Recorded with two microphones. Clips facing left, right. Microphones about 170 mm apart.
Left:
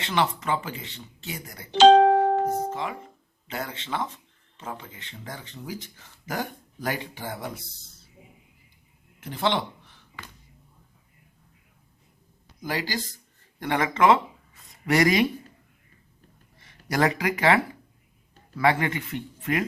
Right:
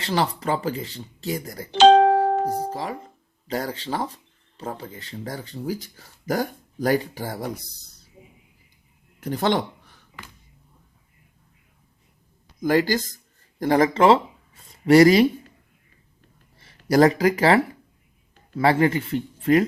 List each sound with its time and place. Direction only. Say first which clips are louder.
0.0 s speech: right 2 dB; 35° right (ahead or behind)
9.2 s speech: right 4 dB; 45° right (ahead or behind)
12.6 s speech: right 10 dB; 45° right (ahead or behind)
16.6 s speech: right 8 dB; 35° right (ahead or behind)